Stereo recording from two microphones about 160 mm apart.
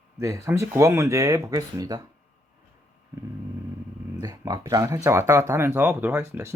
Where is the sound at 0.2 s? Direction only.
20° right (ahead or behind).